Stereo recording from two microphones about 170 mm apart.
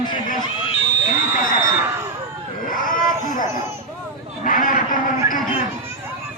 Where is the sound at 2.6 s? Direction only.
50° left (ahead or behind).